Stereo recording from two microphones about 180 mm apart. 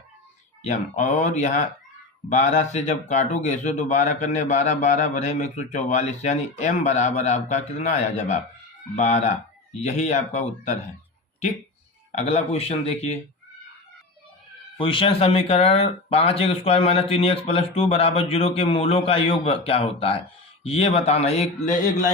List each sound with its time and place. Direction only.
0.6 s speech: 40° left (ahead or behind)
12.1 s speech: 35° left (ahead or behind)
14.8 s speech: 30° left (ahead or behind)